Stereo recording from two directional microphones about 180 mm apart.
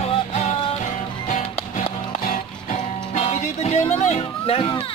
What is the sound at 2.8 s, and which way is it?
Music, 35° left (ahead or behind).